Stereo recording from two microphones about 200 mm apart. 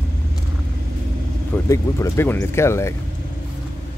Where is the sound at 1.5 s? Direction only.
15° left (ahead or behind).